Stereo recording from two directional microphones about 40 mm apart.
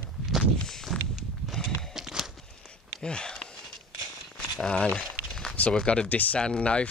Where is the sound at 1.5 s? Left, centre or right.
Centre.